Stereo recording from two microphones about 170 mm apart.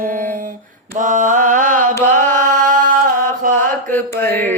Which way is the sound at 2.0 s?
50° right (ahead or behind).